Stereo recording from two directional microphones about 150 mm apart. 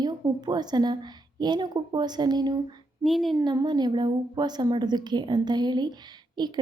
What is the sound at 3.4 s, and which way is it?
A woman's voice, 30° right (ahead or behind).